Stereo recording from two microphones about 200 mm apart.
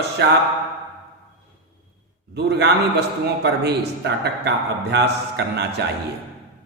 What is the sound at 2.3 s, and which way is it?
A man's voice, 55° right (ahead or behind).